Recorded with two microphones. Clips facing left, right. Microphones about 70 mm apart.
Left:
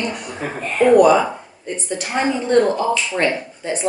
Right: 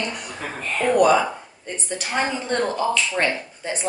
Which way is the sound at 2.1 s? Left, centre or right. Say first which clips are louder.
Left 5 dB; centre.